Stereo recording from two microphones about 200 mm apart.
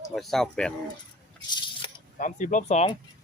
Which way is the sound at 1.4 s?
20° left (ahead or behind).